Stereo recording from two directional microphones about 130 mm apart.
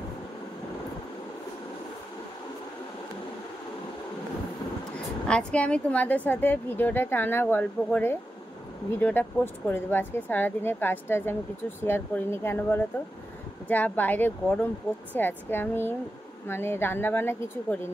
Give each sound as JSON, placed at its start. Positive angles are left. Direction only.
{"t": 4.9, "sound": "speech", "side_deg": 10}